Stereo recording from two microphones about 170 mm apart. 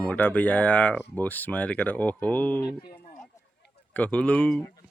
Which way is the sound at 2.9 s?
60° left (ahead or behind).